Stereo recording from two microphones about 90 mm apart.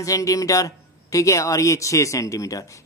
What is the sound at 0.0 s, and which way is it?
A man's voice, 40° left (ahead or behind).